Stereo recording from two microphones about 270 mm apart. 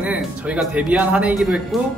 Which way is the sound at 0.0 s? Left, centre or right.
Centre.